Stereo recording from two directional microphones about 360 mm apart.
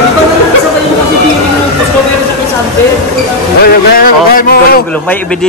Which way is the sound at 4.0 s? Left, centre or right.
Left.